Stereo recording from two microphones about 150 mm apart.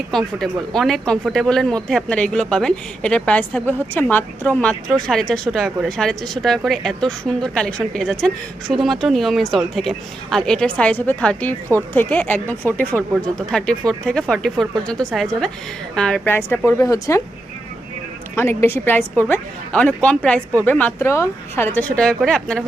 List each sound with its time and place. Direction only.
0.1 s speech: 5° left (ahead or behind); by 17.2 s 20° left (ahead or behind)
18.3 s speech: 15° left (ahead or behind)